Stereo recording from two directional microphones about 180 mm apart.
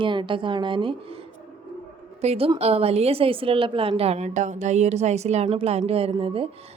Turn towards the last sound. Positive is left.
turn(degrees=-30)  # may be behind; listen again after turning